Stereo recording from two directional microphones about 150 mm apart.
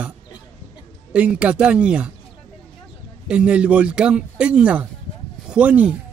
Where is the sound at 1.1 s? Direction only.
5° right (ahead or behind).